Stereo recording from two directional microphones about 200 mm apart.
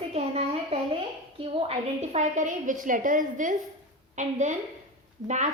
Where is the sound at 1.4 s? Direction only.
30° right (ahead or behind).